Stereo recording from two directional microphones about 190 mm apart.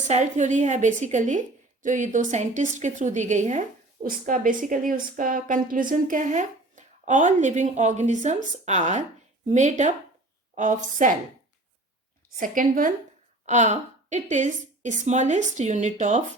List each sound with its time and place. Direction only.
0.1 s a woman's voice: 40° right (ahead or behind)
12.4 s a woman's voice: 45° right (ahead or behind)